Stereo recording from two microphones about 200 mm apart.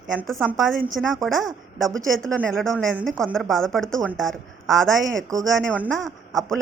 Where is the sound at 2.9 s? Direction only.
5° right (ahead or behind).